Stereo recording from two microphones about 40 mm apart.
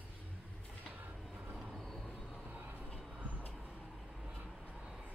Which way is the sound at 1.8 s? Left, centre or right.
Centre.